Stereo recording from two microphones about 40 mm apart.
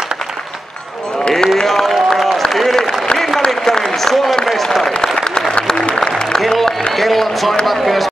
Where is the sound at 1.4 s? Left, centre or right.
Centre.